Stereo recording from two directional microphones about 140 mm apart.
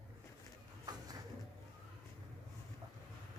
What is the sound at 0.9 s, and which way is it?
Bird, 30° right (ahead or behind).